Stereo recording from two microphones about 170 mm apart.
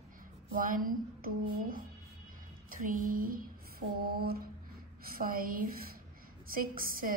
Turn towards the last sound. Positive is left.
turn(degrees=-55)  # may be behind; listen again after turning